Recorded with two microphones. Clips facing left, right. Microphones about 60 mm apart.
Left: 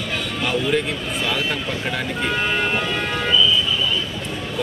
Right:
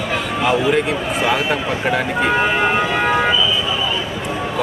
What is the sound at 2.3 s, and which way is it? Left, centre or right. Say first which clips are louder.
Vehicle: right 5 dB; right.